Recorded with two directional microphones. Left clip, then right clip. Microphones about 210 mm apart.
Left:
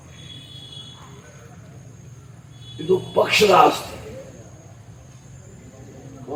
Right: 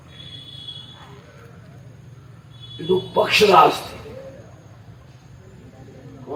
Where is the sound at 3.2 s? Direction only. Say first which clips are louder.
Right 1 dB; 45° right (ahead or behind).